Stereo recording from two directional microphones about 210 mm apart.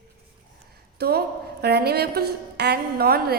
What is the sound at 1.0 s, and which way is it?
A woman's voice, 50° right (ahead or behind).